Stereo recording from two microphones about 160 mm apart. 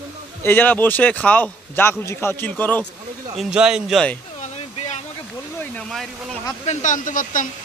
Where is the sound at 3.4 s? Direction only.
5° right (ahead or behind).